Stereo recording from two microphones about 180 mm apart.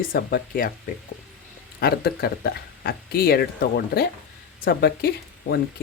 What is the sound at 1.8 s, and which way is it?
Speech, 60° left (ahead or behind).